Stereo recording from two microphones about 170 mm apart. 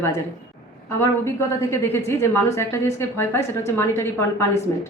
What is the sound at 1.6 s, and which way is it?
A woman's voice, 15° left (ahead or behind).